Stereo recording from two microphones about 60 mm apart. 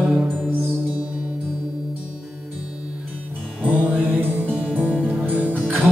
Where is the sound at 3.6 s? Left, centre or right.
Right.